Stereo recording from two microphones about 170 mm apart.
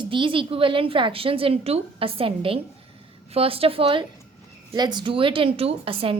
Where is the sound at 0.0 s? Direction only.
30° right (ahead or behind).